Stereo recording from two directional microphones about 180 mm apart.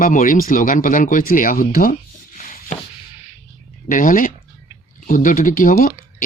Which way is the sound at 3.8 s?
50° left (ahead or behind).